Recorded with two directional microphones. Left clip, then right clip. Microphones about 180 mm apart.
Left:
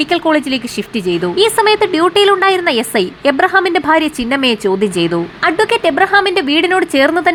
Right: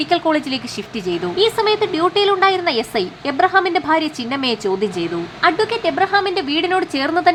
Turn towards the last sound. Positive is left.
turn(degrees=25)  # may be behind; listen again after turning